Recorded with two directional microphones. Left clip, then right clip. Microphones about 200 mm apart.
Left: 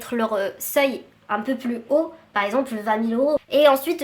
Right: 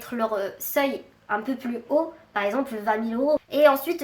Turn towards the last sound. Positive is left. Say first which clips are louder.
# left 3 dB
turn(degrees=30)  # may be behind; listen again after turning